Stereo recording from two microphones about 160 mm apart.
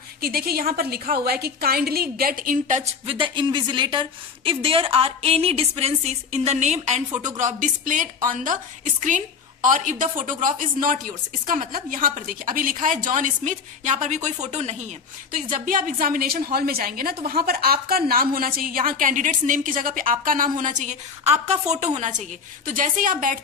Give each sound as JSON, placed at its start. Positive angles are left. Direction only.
{"t": 0.2, "sound": "a woman's voice", "side_deg": -70}
{"t": 3.2, "sound": "a woman's voice", "side_deg": -30}
{"t": 15.3, "sound": "a woman's voice", "side_deg": -60}
{"t": 22.7, "sound": "a woman's voice", "side_deg": -55}